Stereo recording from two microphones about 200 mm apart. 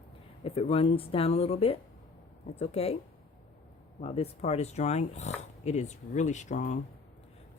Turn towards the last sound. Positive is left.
turn(degrees=40)  # may be behind; listen again after turning